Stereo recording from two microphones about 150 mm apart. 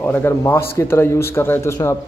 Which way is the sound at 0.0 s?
15° left (ahead or behind).